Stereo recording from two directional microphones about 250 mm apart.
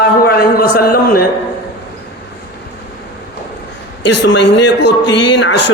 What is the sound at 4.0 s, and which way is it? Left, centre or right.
A man's voice, left.